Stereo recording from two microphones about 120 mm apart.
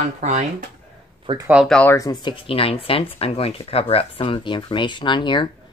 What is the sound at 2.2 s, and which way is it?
Speech, 50° left (ahead or behind).